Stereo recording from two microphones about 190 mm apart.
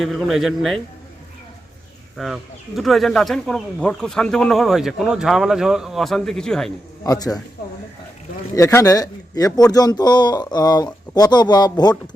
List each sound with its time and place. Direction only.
0.0 s speech: centre (ahead or behind)
2.1 s speech: centre (ahead or behind)
7.0 s a man's voice: 20° left (ahead or behind)
8.5 s a man's voice: 15° left (ahead or behind)